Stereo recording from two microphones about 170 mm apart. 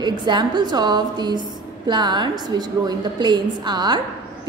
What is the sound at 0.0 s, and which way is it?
A woman's voice, 25° right (ahead or behind).